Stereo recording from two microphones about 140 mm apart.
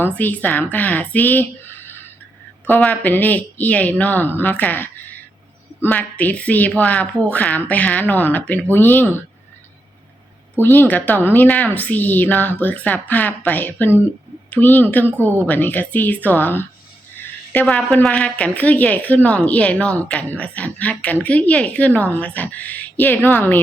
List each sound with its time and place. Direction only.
0.0 s a woman's voice: 15° left (ahead or behind)
10.6 s a woman's voice: 15° left (ahead or behind)